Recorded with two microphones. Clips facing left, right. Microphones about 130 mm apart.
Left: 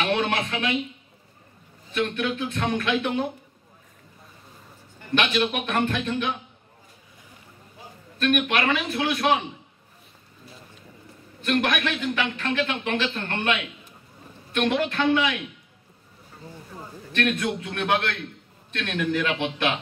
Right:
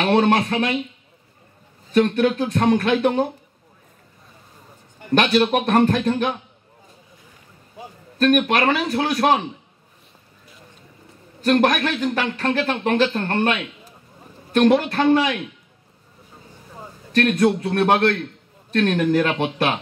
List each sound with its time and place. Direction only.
0.0 s speech: 40° right (ahead or behind)
1.9 s speech: 40° right (ahead or behind)
5.1 s speech: 40° right (ahead or behind)
8.2 s speech: 40° right (ahead or behind)
11.4 s speech: 40° right (ahead or behind)
17.1 s speech: 40° right (ahead or behind)